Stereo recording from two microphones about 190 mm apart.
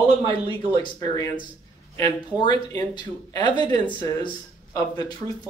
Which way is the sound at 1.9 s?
20° left (ahead or behind).